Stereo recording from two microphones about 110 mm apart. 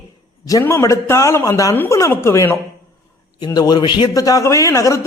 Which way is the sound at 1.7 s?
20° left (ahead or behind).